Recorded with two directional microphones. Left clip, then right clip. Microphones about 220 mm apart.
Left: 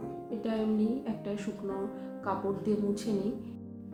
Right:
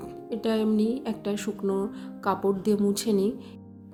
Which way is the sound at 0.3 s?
50° right (ahead or behind).